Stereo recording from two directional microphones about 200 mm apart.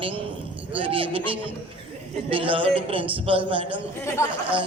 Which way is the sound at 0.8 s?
25° right (ahead or behind).